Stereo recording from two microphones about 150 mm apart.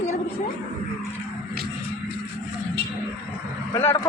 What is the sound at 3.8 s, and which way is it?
Speech, 15° left (ahead or behind).